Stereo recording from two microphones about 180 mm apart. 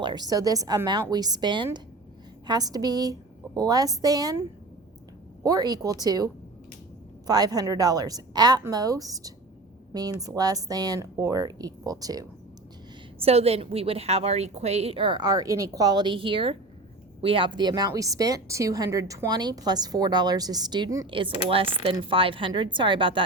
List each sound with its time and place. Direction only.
0.0 s a woman's voice: 25° right (ahead or behind)
5.4 s a woman's voice: 20° right (ahead or behind)
13.2 s a woman's voice: 35° right (ahead or behind)